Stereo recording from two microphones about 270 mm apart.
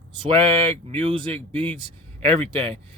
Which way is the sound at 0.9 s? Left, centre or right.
Centre.